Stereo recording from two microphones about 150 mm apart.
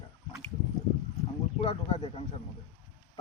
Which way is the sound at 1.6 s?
40° left (ahead or behind).